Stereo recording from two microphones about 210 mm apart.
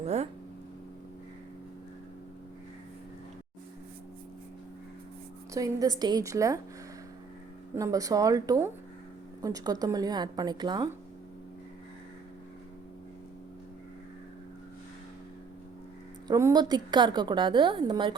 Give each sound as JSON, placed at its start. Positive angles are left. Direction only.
{"t": 0.0, "sound": "speech", "side_deg": -30}
{"t": 5.5, "sound": "a woman's voice", "side_deg": -15}
{"t": 7.8, "sound": "a woman's voice", "side_deg": -15}
{"t": 16.2, "sound": "a woman's voice", "side_deg": -15}